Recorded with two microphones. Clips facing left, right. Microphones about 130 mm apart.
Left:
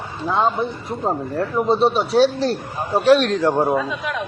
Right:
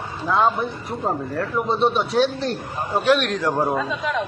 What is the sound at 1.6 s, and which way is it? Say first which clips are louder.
A man's voice: left 3 dB; 30° left (ahead or behind).